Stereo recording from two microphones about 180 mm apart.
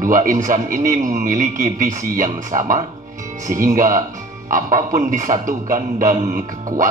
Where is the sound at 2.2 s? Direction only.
45° right (ahead or behind).